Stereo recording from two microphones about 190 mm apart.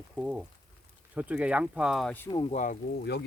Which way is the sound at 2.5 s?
40° left (ahead or behind).